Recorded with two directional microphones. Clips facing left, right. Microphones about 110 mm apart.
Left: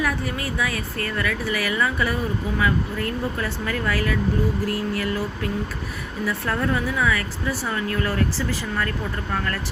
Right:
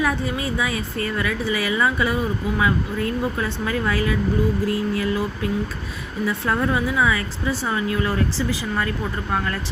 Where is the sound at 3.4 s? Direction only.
20° right (ahead or behind).